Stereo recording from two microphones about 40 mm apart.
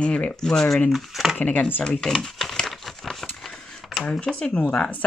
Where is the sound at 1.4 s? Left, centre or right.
Left.